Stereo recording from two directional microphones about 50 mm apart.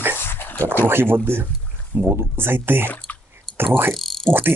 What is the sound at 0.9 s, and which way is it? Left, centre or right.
Speech, right.